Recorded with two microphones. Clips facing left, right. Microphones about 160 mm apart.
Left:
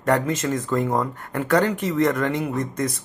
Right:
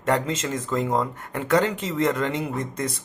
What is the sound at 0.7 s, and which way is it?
A man's voice, 20° right (ahead or behind).